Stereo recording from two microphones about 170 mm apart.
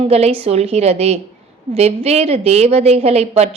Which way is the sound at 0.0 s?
35° right (ahead or behind).